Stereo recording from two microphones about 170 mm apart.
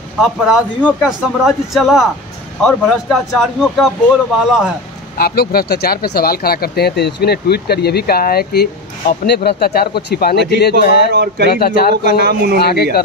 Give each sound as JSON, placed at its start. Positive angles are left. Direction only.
{"t": 0.2, "sound": "a man's voice", "side_deg": 0}
{"t": 5.1, "sound": "speech", "side_deg": 65}
{"t": 11.1, "sound": "speech", "side_deg": -75}
{"t": 11.5, "sound": "speech", "side_deg": 60}
{"t": 12.0, "sound": "speech", "side_deg": -75}
{"t": 12.5, "sound": "speech", "side_deg": 65}